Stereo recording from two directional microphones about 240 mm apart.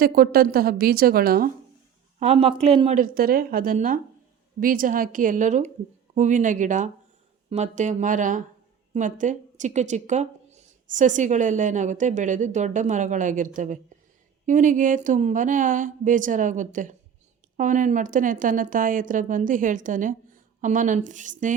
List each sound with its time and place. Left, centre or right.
0.0 s speech: right
2.1 s speech: right